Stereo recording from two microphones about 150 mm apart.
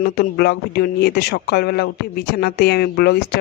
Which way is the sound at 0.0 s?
90° left.